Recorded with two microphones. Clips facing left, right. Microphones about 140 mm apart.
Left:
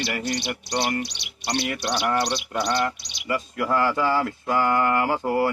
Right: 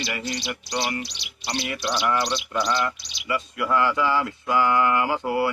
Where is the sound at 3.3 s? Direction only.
45° left (ahead or behind).